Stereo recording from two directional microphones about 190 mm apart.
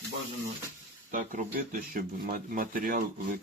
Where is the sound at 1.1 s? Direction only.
40° right (ahead or behind).